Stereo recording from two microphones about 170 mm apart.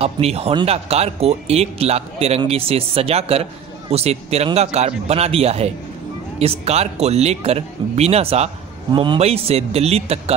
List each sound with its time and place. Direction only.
0.0 s speech: 35° right (ahead or behind)